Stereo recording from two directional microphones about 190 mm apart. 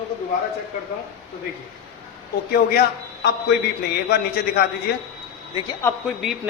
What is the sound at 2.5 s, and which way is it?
A man's voice, 55° left (ahead or behind).